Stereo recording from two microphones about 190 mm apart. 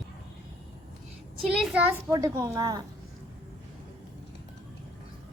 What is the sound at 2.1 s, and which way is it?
Speech, 20° right (ahead or behind).